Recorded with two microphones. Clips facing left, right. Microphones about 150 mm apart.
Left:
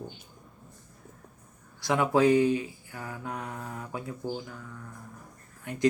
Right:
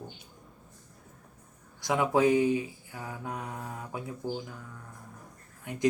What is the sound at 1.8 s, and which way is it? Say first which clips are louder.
Speech: left 2 dB; 20° right (ahead or behind).